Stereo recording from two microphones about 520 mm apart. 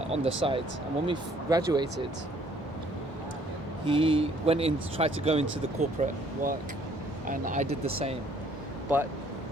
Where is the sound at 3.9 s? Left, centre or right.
Centre.